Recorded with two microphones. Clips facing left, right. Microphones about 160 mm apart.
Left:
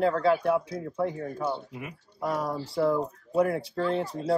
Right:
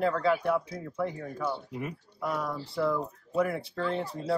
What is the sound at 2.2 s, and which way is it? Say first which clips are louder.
Speech: left 3 dB; 30° left (ahead or behind).